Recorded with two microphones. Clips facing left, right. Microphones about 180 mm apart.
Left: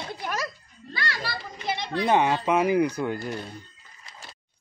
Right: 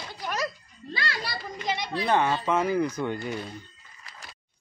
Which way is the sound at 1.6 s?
15° right (ahead or behind).